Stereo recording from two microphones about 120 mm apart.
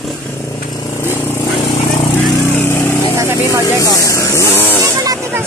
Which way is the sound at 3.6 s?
30° left (ahead or behind).